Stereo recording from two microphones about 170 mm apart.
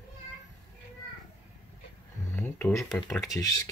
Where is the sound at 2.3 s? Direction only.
15° left (ahead or behind).